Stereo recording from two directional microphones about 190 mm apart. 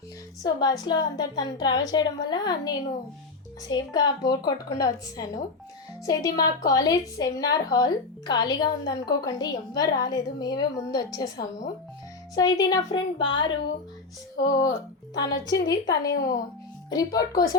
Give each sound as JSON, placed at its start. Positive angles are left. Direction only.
{"t": 0.4, "sound": "a woman's voice", "side_deg": 20}